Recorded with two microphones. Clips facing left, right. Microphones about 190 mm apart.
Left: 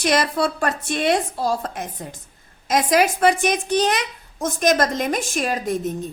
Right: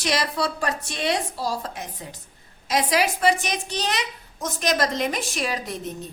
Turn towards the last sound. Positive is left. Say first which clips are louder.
# left 6 dB
turn(degrees=50)  # may be behind; listen again after turning